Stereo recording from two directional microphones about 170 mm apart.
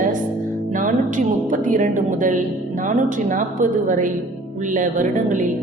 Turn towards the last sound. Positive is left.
turn(degrees=-50)  # may be behind; listen again after turning